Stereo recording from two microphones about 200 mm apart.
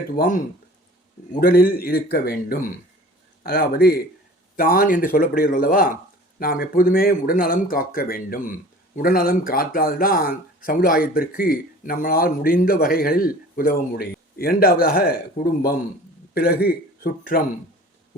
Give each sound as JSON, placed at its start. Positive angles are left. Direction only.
{"t": 0.2, "sound": "speech", "side_deg": 40}
{"t": 16.3, "sound": "speech", "side_deg": 50}